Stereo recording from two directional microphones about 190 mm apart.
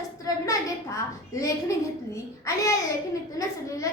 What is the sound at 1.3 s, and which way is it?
Speech, 15° left (ahead or behind).